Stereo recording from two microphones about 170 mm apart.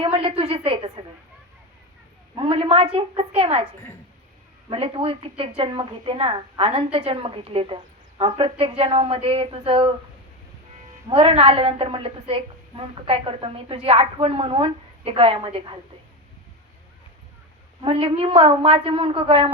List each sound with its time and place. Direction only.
0.0 s a woman's voice: 35° right (ahead or behind)
2.3 s a woman's voice: 35° right (ahead or behind)
4.7 s a woman's voice: 30° right (ahead or behind)
11.1 s a woman's voice: 30° right (ahead or behind)
17.8 s a woman's voice: 35° right (ahead or behind)